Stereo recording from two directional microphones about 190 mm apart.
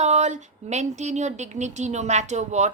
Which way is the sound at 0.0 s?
35° right (ahead or behind).